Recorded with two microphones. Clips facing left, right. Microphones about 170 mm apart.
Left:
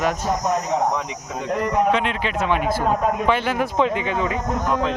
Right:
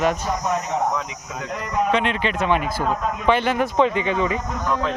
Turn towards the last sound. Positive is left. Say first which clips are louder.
# left 1 dB
turn(degrees=15)  # may be behind; listen again after turning